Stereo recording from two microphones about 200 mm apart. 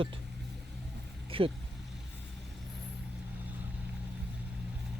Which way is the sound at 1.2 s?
25° right (ahead or behind).